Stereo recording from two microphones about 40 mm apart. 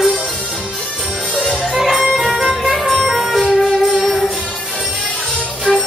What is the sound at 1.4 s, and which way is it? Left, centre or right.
Music, centre.